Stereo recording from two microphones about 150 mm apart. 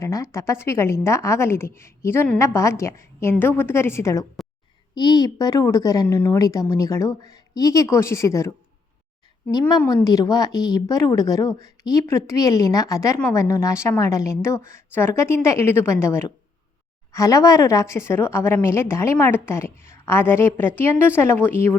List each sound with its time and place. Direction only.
0.0 s a woman's voice: 20° left (ahead or behind)